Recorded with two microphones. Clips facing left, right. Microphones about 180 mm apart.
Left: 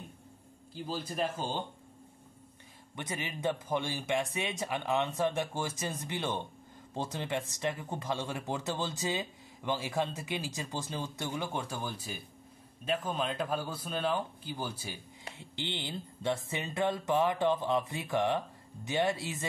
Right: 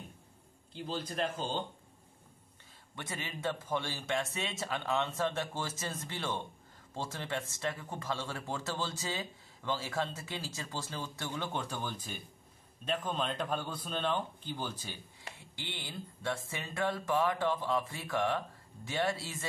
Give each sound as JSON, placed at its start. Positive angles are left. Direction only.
{"t": 0.7, "sound": "speech", "side_deg": 5}
{"t": 3.0, "sound": "speech", "side_deg": 15}
{"t": 15.3, "sound": "speech", "side_deg": 25}
{"t": 16.4, "sound": "a sound", "side_deg": 20}